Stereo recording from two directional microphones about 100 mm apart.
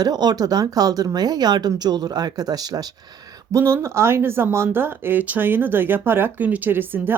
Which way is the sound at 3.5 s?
25° right (ahead or behind).